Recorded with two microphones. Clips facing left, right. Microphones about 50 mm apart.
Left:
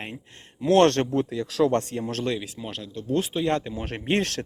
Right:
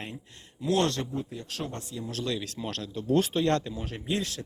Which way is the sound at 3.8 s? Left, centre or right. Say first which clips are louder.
Left 6 dB; left.